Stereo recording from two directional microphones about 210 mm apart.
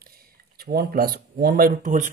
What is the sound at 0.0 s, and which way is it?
Speech, 45° right (ahead or behind).